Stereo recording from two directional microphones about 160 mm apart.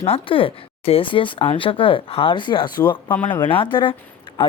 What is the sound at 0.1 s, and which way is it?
A man's voice, 35° left (ahead or behind).